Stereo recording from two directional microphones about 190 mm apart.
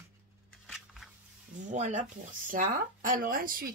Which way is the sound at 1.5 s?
40° right (ahead or behind).